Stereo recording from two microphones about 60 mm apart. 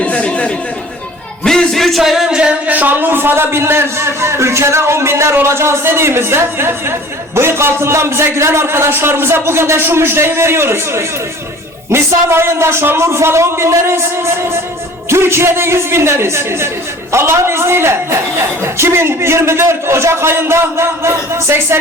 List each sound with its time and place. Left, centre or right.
0.0 s chatter: left
1.5 s a sound: centre
2.3 s music: centre
2.7 s a man's voice: right